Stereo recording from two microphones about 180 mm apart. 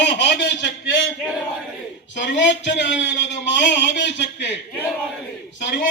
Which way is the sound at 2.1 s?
80° left.